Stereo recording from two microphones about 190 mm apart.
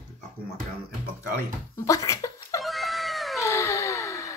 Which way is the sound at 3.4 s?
15° left (ahead or behind).